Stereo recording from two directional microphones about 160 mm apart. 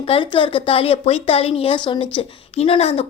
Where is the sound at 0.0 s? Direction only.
35° left (ahead or behind).